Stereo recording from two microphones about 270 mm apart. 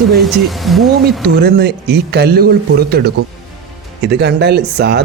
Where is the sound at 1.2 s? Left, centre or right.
Right.